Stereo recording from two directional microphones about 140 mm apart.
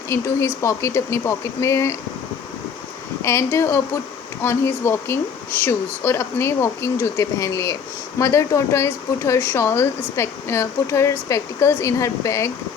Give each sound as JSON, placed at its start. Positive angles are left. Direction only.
{"t": 0.1, "sound": "speech", "side_deg": 20}
{"t": 3.2, "sound": "speech", "side_deg": 20}